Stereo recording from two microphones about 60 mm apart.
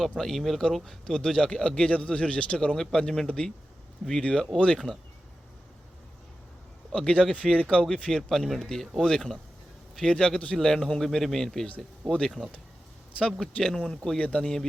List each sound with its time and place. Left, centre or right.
0.2 s speech: centre
1.0 s speech: centre
6.9 s speech: centre
7.2 s speech: centre
7.4 s speech: centre
8.3 s speech: centre
13.4 s speech: centre